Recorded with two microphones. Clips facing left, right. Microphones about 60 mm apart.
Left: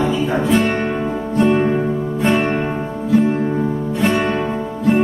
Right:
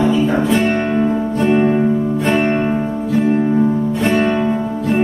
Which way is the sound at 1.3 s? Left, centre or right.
Centre.